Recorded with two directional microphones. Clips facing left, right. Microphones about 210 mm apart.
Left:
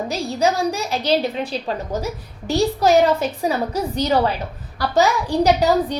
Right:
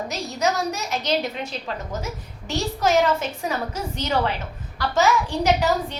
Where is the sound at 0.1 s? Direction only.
30° left (ahead or behind).